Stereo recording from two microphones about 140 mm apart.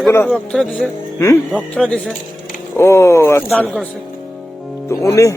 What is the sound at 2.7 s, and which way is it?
Speech, 20° left (ahead or behind).